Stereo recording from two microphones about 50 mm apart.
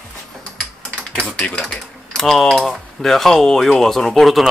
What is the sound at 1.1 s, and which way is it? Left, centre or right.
Speech, centre.